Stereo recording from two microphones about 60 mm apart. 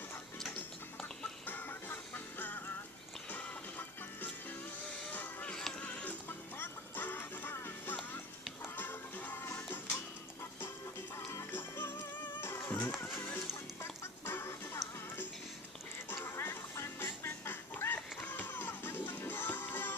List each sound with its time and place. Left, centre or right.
1.5 s music: left
5.7 s music: left
11.5 s music: left
14.2 s music: left